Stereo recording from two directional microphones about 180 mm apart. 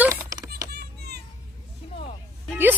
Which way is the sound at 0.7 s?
65° right (ahead or behind).